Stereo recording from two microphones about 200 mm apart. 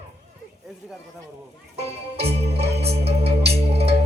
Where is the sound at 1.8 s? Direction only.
30° right (ahead or behind).